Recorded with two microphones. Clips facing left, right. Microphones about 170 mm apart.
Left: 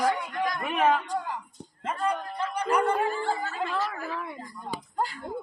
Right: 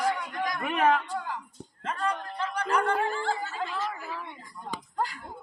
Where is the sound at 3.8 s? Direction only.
65° left (ahead or behind).